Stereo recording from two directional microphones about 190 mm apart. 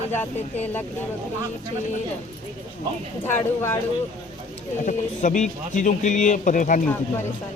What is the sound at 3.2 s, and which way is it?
Speech, 10° left (ahead or behind).